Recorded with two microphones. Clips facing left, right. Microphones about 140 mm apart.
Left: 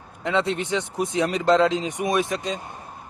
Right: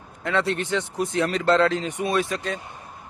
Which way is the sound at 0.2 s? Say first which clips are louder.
Left 1 dB; 20° left (ahead or behind).